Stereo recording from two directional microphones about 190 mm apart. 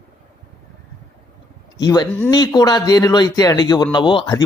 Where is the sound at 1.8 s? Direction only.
20° left (ahead or behind).